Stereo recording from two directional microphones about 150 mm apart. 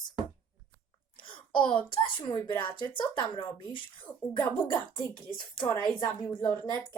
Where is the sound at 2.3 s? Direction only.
30° left (ahead or behind).